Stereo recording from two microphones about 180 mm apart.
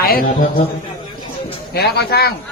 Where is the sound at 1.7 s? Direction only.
60° left (ahead or behind).